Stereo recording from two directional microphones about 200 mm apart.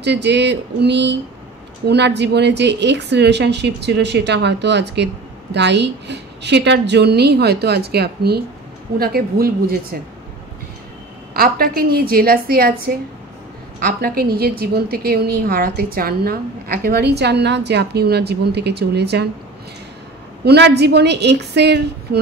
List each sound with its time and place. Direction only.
0.0 s a woman's voice: 60° right (ahead or behind)
11.3 s a woman's voice: 50° right (ahead or behind)
20.4 s a woman's voice: 55° right (ahead or behind)